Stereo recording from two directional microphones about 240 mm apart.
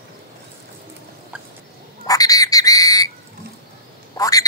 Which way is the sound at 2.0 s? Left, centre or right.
Centre.